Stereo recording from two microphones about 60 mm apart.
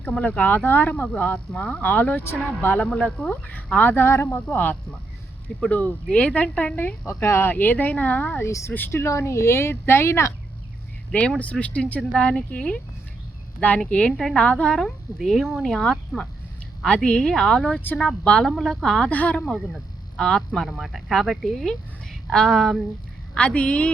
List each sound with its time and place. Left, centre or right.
0.0 s speech: left
3.8 s speech: left
4.4 s speech: left
7.2 s speech: left
7.5 s speech: left
8.4 s a woman's voice: left
11.6 s a woman's voice: left
15.2 s a woman's voice: centre
15.8 s a woman's voice: centre
19.0 s speech: left
19.5 s a woman's voice: centre
20.1 s a woman's voice: centre
20.7 s a woman's voice: centre
23.3 s speech: centre